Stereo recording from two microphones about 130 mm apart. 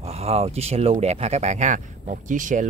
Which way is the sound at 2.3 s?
80° right.